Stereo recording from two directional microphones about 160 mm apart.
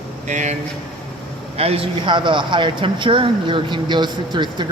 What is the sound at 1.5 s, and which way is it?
Speech, 35° right (ahead or behind).